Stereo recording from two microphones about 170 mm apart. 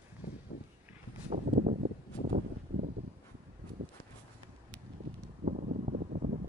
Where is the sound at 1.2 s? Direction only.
40° right (ahead or behind).